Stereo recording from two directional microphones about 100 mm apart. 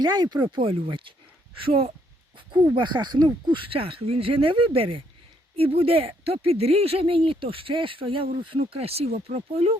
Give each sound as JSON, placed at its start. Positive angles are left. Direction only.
{"t": 0.0, "sound": "speech", "side_deg": -45}
{"t": 0.4, "sound": "speech", "side_deg": -60}
{"t": 2.7, "sound": "speech", "side_deg": -50}
{"t": 8.7, "sound": "speech", "side_deg": -85}